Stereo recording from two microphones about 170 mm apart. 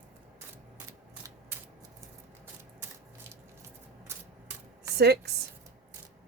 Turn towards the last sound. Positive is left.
turn(degrees=-70)  # may be behind; listen again after turning